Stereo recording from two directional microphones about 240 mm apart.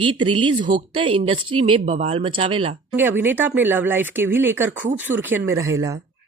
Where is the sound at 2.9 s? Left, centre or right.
Centre.